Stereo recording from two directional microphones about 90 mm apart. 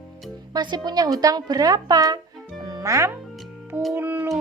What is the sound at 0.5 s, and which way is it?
A woman's voice, 50° right (ahead or behind).